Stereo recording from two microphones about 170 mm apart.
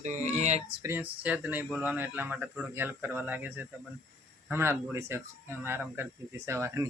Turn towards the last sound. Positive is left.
turn(degrees=-15)  # may be behind; listen again after turning